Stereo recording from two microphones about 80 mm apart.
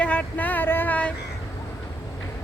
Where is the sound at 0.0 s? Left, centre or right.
Centre.